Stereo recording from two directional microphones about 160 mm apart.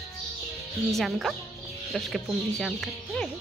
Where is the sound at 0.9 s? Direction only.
Centre (ahead or behind).